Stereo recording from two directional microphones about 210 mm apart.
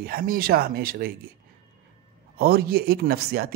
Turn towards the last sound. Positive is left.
turn(degrees=-45)  # may be behind; listen again after turning